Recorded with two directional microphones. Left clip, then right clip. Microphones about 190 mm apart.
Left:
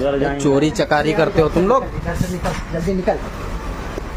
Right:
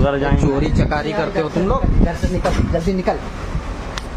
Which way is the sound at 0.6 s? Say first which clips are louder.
Left 4 dB; 15° left (ahead or behind).